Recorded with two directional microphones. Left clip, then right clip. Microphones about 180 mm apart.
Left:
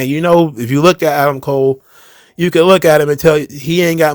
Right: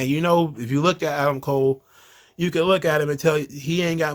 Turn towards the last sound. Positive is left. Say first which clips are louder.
# left 11 dB
turn(degrees=45)  # may be behind; listen again after turning